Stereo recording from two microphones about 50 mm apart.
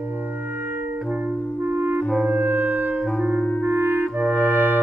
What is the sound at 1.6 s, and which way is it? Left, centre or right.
Clarinet, right.